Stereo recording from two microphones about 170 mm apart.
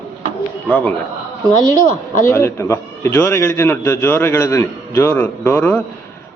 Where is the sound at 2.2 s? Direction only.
15° left (ahead or behind).